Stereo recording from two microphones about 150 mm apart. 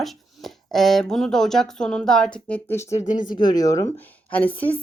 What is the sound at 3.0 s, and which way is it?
Speech, 60° left (ahead or behind).